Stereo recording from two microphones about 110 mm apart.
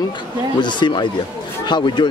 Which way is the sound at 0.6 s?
45° left (ahead or behind).